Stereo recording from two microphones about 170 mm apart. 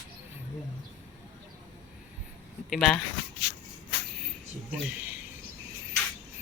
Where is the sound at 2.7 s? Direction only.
Centre (ahead or behind).